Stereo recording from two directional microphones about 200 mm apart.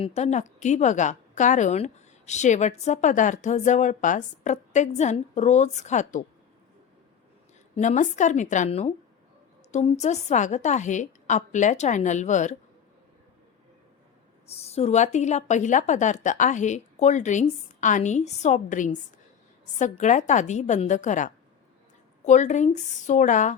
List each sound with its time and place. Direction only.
0.0 s a woman's voice: 35° left (ahead or behind)
7.8 s a woman's voice: 35° left (ahead or behind)
14.4 s a woman's voice: 30° left (ahead or behind)